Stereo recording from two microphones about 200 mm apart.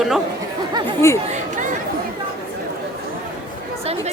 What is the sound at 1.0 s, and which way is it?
Speech, 15° left (ahead or behind).